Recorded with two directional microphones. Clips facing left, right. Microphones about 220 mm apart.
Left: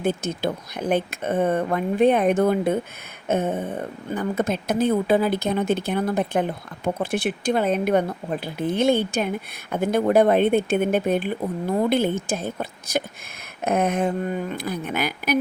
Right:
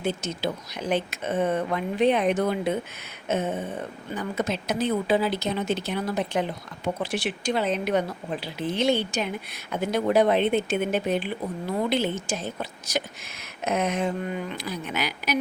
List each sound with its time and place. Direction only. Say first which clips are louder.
0.0 s speech: left 4 dB; 55° left (ahead or behind)